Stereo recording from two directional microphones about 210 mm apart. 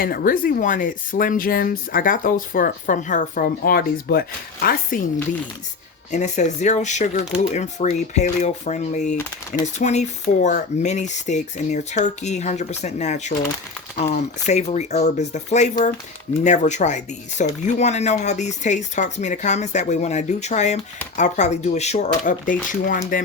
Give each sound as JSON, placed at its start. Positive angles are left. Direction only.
{"t": 0.0, "sound": "speech", "side_deg": 45}
{"t": 6.1, "sound": "speech", "side_deg": 35}